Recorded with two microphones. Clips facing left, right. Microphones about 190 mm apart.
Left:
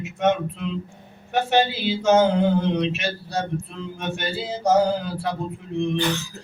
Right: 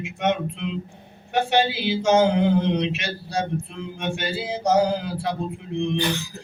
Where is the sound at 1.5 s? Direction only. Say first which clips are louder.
Left 1 dB; 15° right (ahead or behind).